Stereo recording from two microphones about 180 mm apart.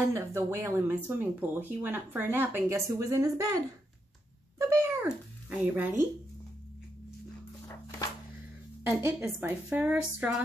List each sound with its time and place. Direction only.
0.1 s speech: 15° right (ahead or behind)
4.6 s cat: 15° right (ahead or behind)
5.0 s speech: 5° right (ahead or behind)
8.8 s speech: 10° right (ahead or behind)